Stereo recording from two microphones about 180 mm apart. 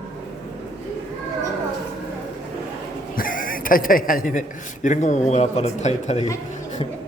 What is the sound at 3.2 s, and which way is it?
A man's voice, 50° left (ahead or behind).